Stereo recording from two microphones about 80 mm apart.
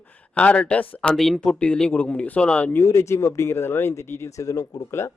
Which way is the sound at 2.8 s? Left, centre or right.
Left.